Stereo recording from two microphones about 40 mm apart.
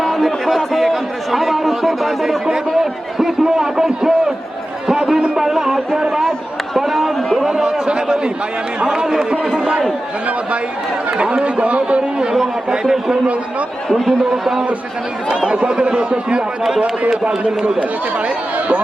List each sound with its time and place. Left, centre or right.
0.0 s a man's voice: centre
4.9 s a sound: centre
6.7 s a sound: centre
7.3 s a sound: centre
8.8 s a man's voice: right
11.4 s a man's voice: right
12.8 s a man's voice: centre
13.9 s a man's voice: centre
15.3 s a man's voice: right
16.6 s a man's voice: centre